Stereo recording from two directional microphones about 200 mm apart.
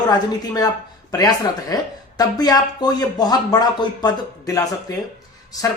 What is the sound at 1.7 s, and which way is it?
Speech, 20° left (ahead or behind).